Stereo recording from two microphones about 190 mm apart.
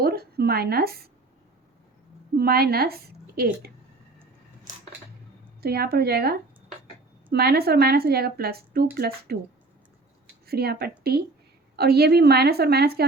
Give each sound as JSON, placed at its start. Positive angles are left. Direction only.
{"t": 0.0, "sound": "speech", "side_deg": -55}
{"t": 2.3, "sound": "speech", "side_deg": -55}
{"t": 5.6, "sound": "speech", "side_deg": -55}
{"t": 7.3, "sound": "speech", "side_deg": -55}
{"t": 10.4, "sound": "speech", "side_deg": -55}